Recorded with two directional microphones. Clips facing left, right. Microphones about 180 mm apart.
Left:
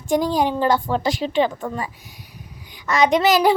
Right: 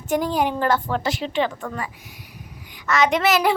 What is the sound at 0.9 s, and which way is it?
Speech, 35° left (ahead or behind).